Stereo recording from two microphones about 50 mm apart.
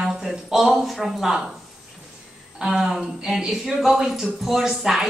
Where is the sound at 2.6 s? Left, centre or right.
Centre.